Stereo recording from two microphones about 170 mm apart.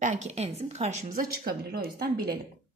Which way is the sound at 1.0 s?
60° right (ahead or behind).